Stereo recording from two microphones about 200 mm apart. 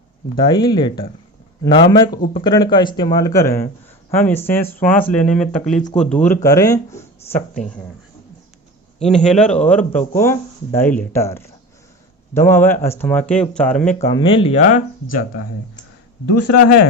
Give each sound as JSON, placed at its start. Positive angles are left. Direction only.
{"t": 0.3, "sound": "speech", "side_deg": 20}
{"t": 9.0, "sound": "a man's voice", "side_deg": 0}
{"t": 14.1, "sound": "speech", "side_deg": 25}